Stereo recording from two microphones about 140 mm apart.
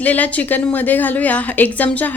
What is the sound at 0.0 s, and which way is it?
A woman's voice, 10° left (ahead or behind).